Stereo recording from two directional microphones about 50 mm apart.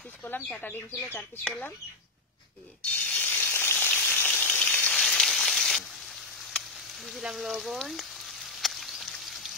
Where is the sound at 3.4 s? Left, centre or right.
Left.